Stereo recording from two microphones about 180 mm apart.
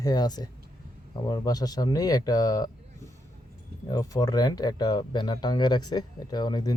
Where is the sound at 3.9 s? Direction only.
20° left (ahead or behind).